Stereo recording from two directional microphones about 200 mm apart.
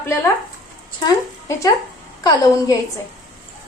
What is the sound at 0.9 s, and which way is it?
Speech, 15° left (ahead or behind).